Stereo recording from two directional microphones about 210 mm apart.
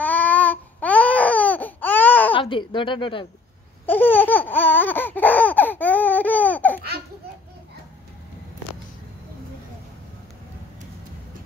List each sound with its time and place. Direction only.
0.0 s baby cry: 5° left (ahead or behind)
2.3 s a woman's voice: 25° left (ahead or behind)
3.8 s laughter: 10° left (ahead or behind)